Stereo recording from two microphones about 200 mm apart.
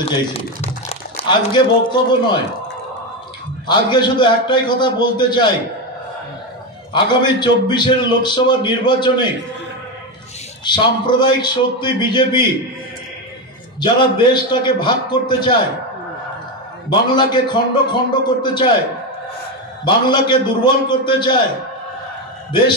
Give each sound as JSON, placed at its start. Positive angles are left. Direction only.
{"t": 0.8, "sound": "a man's voice", "side_deg": 25}
{"t": 3.6, "sound": "a man's voice", "side_deg": 25}
{"t": 6.9, "sound": "a man's voice", "side_deg": 25}
{"t": 10.6, "sound": "a man's voice", "side_deg": 20}
{"t": 13.7, "sound": "a man's voice", "side_deg": 25}
{"t": 16.9, "sound": "a man's voice", "side_deg": 20}
{"t": 19.8, "sound": "a man's voice", "side_deg": 20}